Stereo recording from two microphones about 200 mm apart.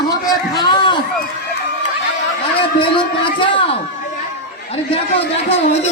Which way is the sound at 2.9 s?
25° left (ahead or behind).